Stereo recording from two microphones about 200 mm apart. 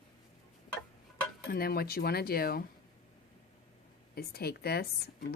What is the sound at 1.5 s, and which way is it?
Speech, 50° left (ahead or behind).